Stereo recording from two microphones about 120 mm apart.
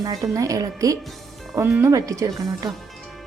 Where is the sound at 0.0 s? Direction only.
30° right (ahead or behind).